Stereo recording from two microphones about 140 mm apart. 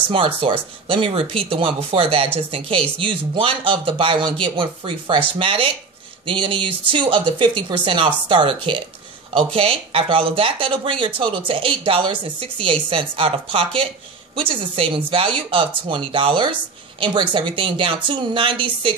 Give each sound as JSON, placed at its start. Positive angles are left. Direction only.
{"t": 0.1, "sound": "speech", "side_deg": -40}